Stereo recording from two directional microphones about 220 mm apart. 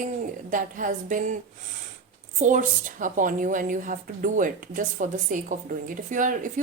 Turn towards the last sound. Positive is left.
turn(degrees=-35)  # may be behind; listen again after turning